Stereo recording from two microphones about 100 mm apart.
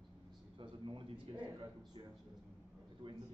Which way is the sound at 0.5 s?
55° right (ahead or behind).